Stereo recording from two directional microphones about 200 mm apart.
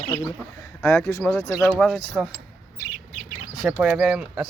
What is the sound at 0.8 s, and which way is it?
Speech, 15° left (ahead or behind).